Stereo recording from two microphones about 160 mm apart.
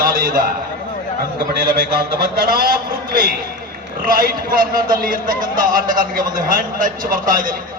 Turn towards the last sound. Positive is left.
turn(degrees=-60)  # may be behind; listen again after turning